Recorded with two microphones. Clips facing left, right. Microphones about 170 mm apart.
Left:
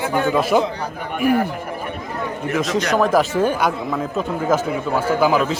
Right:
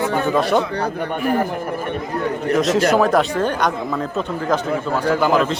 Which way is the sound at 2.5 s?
Centre (ahead or behind).